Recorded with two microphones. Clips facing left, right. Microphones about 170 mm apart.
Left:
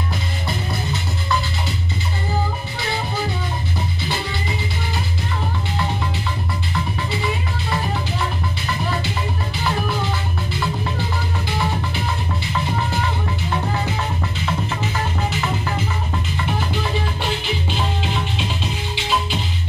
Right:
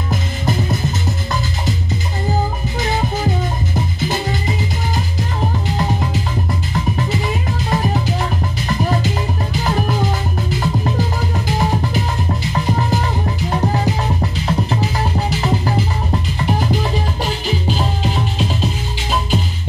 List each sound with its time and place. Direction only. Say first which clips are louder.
0.1 s music: right 5 dB; 45° right (ahead or behind)
4.3 s music: right 5 dB; 40° right (ahead or behind)
7.7 s music: right 6 dB; 40° right (ahead or behind)